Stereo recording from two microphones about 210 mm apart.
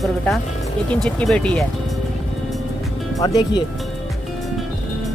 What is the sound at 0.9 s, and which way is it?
Speech, 5° left (ahead or behind).